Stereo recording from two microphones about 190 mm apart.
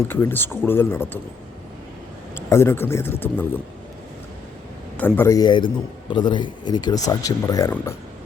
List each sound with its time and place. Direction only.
0.1 s speech: 10° left (ahead or behind)
2.3 s speech: 15° left (ahead or behind)
4.9 s a man's voice: 10° left (ahead or behind)